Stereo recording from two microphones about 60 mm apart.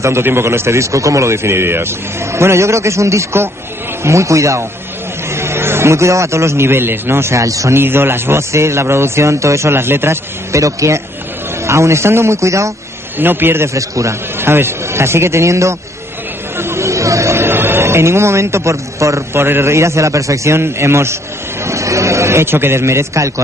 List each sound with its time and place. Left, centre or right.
0.0 s a man's voice: right
5.3 s a man's voice: right
7.4 s a man's voice: right
7.7 s a man's voice: right
10.5 s a man's voice: right
13.2 s a man's voice: right
13.7 s a man's voice: right
14.4 s a man's voice: right
16.5 s a sound: right
19.4 s a man's voice: right
21.6 s a man's voice: right